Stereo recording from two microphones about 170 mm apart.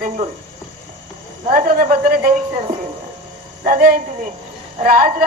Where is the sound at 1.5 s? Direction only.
50° right (ahead or behind).